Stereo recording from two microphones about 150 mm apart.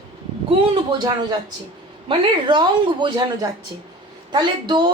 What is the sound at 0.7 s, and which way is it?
A woman's voice, 30° right (ahead or behind).